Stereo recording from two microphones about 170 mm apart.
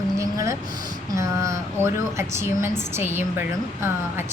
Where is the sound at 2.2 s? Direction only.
15° right (ahead or behind).